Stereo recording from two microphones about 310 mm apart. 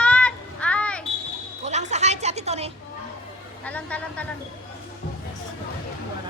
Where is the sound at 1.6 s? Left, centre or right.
Right.